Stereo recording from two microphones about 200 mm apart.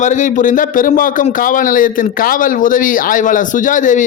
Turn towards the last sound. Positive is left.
turn(degrees=40)  # may be behind; listen again after turning